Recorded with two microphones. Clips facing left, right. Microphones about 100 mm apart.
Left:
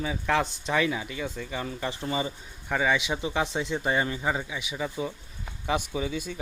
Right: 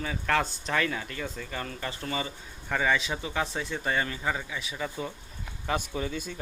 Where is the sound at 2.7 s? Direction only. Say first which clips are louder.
Left 1 dB; 10° left (ahead or behind).